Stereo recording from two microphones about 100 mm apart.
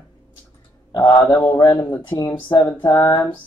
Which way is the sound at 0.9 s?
30° left (ahead or behind).